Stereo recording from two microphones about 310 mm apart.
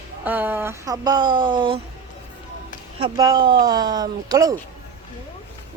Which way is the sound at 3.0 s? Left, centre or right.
Centre.